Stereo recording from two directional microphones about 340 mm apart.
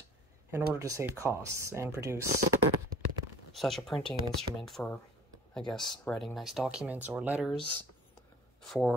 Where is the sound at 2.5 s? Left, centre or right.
Right.